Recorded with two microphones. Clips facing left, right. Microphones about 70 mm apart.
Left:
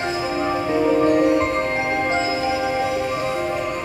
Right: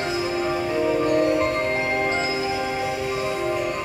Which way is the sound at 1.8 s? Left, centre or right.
Centre.